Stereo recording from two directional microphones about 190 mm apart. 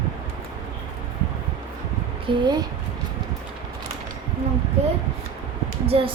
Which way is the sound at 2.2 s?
25° right (ahead or behind).